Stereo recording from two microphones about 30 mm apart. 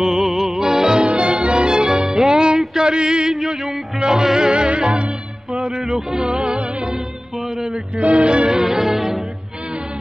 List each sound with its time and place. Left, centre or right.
0.0 s music: centre
1.0 s music: right
2.8 s a sound: right
3.3 s music: centre
4.0 s music: right
7.3 s music: centre
7.9 s music: right
8.6 s music: centre